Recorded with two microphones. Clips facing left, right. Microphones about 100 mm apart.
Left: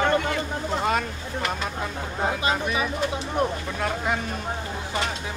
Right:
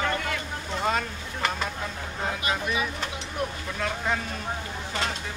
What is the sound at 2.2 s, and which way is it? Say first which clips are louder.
Speech: left 4 dB; 25° left (ahead or behind).